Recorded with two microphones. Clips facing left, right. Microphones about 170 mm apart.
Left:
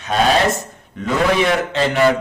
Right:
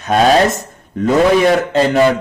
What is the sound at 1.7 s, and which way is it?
Speech, 40° right (ahead or behind).